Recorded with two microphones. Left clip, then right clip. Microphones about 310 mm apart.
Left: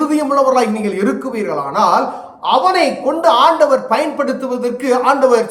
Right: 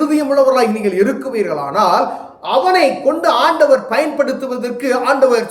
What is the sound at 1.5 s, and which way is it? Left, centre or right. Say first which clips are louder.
Speech: left 1 dB; left.